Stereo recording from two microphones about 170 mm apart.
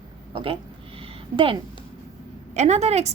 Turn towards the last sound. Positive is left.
turn(degrees=-40)  # may be behind; listen again after turning